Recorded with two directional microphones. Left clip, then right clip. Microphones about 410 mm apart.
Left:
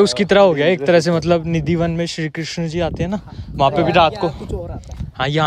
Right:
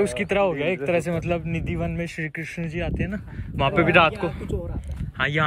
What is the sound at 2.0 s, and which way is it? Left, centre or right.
Speech, left.